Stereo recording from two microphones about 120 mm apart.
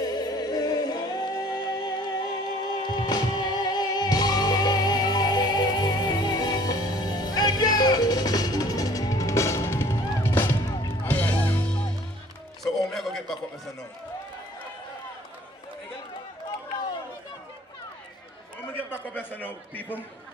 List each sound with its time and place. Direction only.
0.0 s music: 35° left (ahead or behind); by 11.8 s 15° left (ahead or behind)
12.6 s music: centre (ahead or behind)
18.6 s a sound: 15° left (ahead or behind)